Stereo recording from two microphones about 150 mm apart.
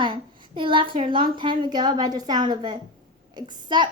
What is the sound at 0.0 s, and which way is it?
A child's voice, 35° right (ahead or behind).